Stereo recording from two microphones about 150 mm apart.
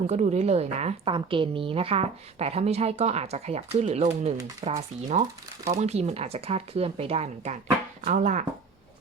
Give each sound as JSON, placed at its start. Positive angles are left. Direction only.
{"t": 0.1, "sound": "a woman's voice", "side_deg": -50}
{"t": 8.0, "sound": "speech", "side_deg": -55}